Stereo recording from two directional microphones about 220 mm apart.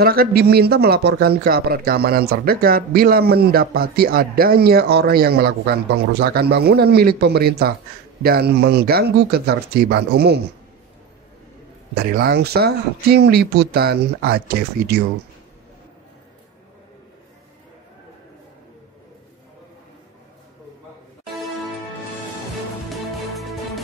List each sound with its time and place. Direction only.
0.0 s speech: 45° right (ahead or behind)
11.9 s speech: 45° right (ahead or behind)
22.8 s music: centre (ahead or behind)